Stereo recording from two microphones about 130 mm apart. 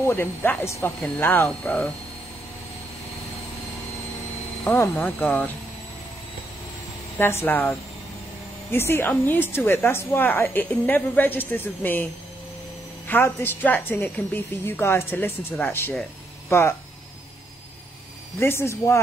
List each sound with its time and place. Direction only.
0.0 s a woman's voice: 20° left (ahead or behind)
4.6 s a woman's voice: 15° left (ahead or behind)
7.2 s a woman's voice: 15° left (ahead or behind)
8.7 s a woman's voice: 20° left (ahead or behind)
18.4 s speech: 20° left (ahead or behind)